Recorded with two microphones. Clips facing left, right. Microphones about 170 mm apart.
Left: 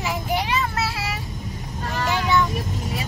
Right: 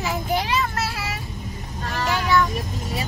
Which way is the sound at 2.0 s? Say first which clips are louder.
Right 1 dB; 20° left (ahead or behind).